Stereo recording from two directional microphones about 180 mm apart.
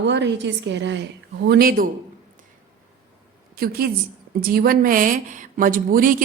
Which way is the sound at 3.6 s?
55° right (ahead or behind).